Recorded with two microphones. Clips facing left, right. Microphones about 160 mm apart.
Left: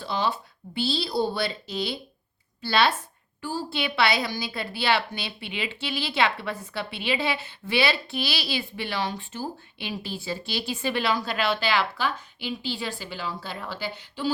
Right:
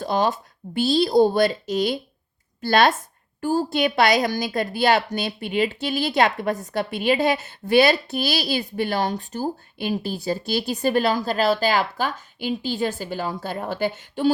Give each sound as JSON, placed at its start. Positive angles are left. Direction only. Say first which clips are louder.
{"t": 0.0, "sound": "a woman's voice", "louder": "right 6 dB", "side_deg": -45}